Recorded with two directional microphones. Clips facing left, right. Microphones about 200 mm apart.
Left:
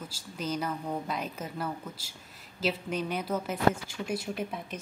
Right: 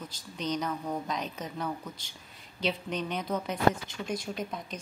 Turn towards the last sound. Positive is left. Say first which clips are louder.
# left 1 dB
turn(degrees=5)  # may be behind; listen again after turning